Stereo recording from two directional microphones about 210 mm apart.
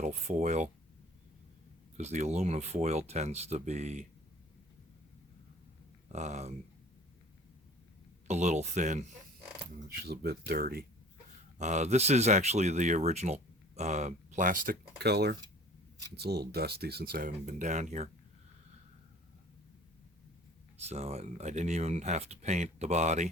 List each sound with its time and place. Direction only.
0.0 s speech: 35° right (ahead or behind)
2.0 s speech: 30° right (ahead or behind)
6.1 s speech: 35° right (ahead or behind)
8.3 s speech: 35° right (ahead or behind)
10.0 s speech: 50° right (ahead or behind)
11.5 s speech: 35° right (ahead or behind)
20.8 s speech: 30° right (ahead or behind)